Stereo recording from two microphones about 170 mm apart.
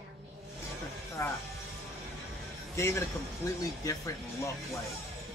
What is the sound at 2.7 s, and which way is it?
A man's voice, 15° left (ahead or behind).